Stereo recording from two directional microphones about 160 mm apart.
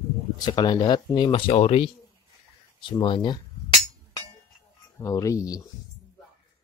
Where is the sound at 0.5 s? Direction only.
25° left (ahead or behind).